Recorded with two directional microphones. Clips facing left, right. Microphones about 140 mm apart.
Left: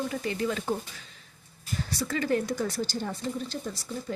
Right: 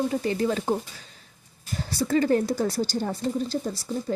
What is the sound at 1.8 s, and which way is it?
Speech, 35° right (ahead or behind).